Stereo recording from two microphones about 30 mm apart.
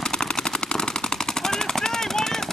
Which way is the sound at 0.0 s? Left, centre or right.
Left.